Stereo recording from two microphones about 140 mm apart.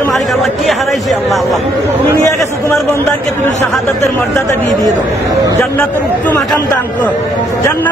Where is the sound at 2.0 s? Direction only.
20° left (ahead or behind).